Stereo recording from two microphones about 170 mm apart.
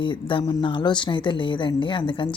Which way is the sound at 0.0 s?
30° left (ahead or behind).